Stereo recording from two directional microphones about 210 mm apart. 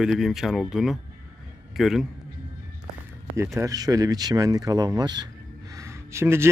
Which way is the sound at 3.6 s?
15° right (ahead or behind).